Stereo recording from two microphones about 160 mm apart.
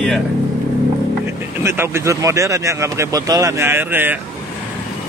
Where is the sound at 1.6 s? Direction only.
15° right (ahead or behind).